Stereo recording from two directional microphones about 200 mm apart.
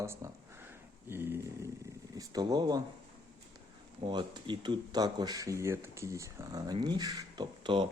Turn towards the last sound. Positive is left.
turn(degrees=-20)  # may be behind; listen again after turning